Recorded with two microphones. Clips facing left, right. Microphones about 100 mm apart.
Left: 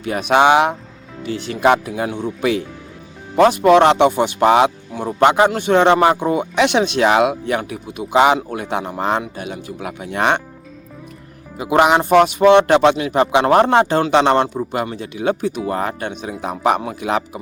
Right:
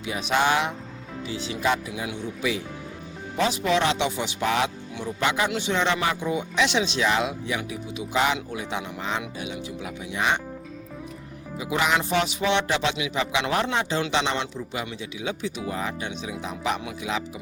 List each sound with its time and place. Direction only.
0.0 s speech: 55° left (ahead or behind)
1.9 s speech: 50° left (ahead or behind)
8.4 s speech: 50° left (ahead or behind)
11.5 s speech: 60° left (ahead or behind)